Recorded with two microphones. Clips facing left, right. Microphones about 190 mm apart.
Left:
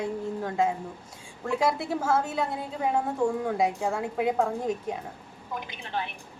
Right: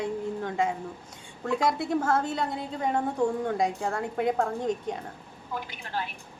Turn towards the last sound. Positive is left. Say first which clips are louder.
# left 1 dB
turn(degrees=20)  # may be behind; listen again after turning